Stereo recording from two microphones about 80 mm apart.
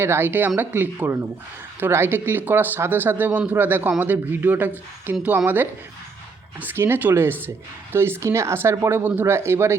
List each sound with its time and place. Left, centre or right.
0.0 s speech: right
6.6 s speech: right